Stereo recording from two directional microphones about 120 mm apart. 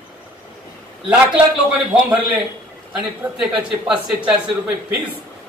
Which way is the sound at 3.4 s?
5° right (ahead or behind).